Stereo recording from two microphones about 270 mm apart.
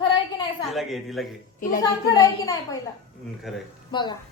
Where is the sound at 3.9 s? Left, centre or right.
Centre.